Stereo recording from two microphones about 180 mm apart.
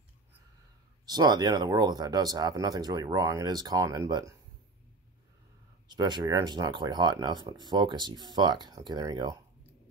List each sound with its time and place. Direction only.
1.0 s speech: 20° right (ahead or behind)
5.9 s speech: 25° right (ahead or behind)